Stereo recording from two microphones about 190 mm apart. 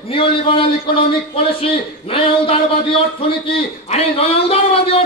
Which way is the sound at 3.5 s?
30° left (ahead or behind).